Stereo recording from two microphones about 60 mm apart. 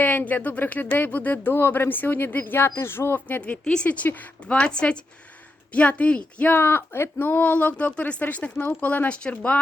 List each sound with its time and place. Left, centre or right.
0.0 s speech: left
1.5 s speech: left
3.2 s speech: left
3.6 s speech: centre
3.8 s speech: left
6.5 s speech: left